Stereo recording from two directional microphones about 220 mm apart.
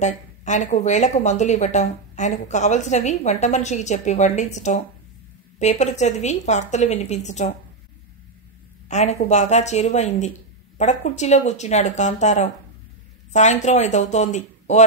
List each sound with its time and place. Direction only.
0.0 s speech: 30° left (ahead or behind)
8.8 s speech: 30° left (ahead or behind)